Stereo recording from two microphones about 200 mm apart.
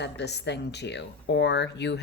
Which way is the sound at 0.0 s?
55° left (ahead or behind).